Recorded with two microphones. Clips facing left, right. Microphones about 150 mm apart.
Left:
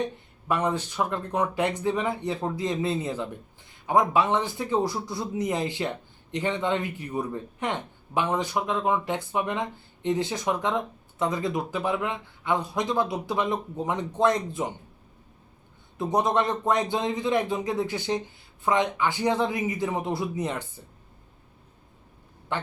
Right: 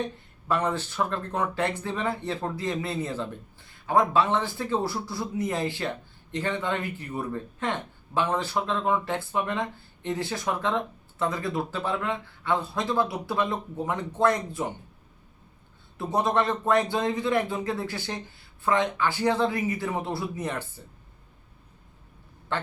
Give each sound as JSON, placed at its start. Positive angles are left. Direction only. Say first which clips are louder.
{"t": 0.0, "sound": "speech", "louder": "left 2 dB", "side_deg": 15}
{"t": 16.0, "sound": "speech", "louder": "left 1 dB", "side_deg": 20}
{"t": 22.5, "sound": "quack", "louder": "even", "side_deg": 15}